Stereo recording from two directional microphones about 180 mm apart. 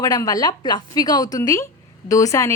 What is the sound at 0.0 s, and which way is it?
A woman's voice, 20° left (ahead or behind).